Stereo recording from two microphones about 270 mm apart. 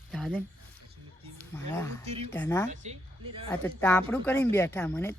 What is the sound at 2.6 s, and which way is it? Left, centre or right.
Speech, right.